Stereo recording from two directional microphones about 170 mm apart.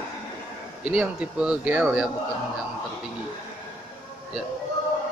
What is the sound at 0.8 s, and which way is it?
Speech, 5° right (ahead or behind).